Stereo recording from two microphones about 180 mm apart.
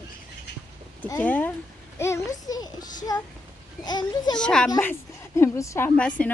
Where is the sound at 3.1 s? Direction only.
20° left (ahead or behind).